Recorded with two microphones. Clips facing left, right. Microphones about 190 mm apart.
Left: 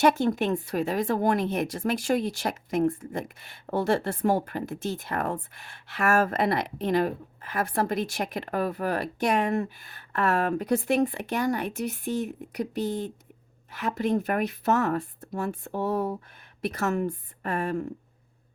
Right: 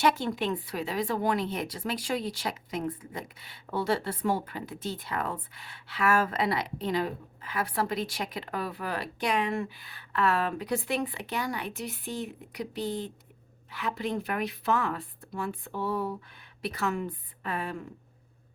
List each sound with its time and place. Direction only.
0.0 s speech: 45° left (ahead or behind)